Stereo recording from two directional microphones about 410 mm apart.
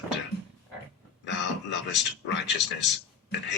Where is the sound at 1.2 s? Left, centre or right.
Left.